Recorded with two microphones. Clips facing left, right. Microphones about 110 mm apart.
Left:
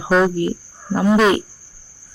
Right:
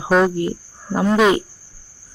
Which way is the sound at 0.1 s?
Centre (ahead or behind).